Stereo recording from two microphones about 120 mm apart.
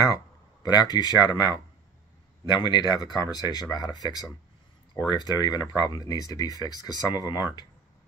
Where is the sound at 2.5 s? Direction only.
40° left (ahead or behind).